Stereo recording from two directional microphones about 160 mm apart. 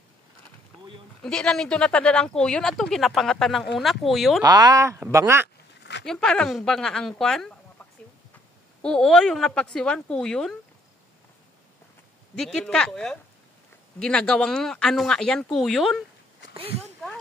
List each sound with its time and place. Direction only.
1.2 s speech: 5° left (ahead or behind)
4.4 s speech: 25° right (ahead or behind)
6.0 s speech: 5° left (ahead or behind)
8.8 s speech: 5° left (ahead or behind)
12.4 s speech: 5° left (ahead or behind)